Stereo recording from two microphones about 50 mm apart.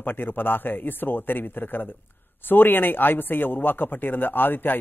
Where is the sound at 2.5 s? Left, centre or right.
Left.